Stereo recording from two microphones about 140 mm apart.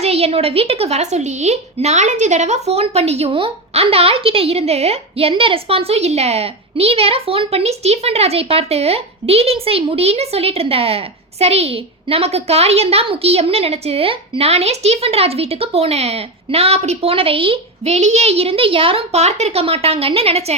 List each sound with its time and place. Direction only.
0.0 s a woman's voice: 45° right (ahead or behind)